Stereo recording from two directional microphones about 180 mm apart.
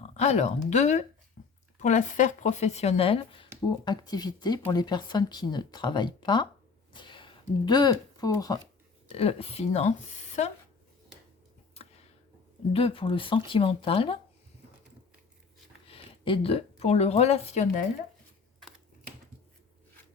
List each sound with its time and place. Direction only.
0.0 s speech: 40° left (ahead or behind); by 8.5 s 20° left (ahead or behind)
9.1 s speech: 35° left (ahead or behind)
11.7 s a sound: 35° left (ahead or behind)
12.7 s speech: 30° left (ahead or behind)
15.9 s speech: 30° left (ahead or behind)